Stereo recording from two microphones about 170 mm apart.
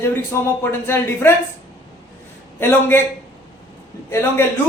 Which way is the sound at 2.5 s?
15° left (ahead or behind).